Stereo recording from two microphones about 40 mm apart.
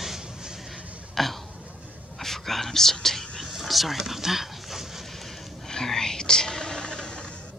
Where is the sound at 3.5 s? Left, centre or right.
Centre.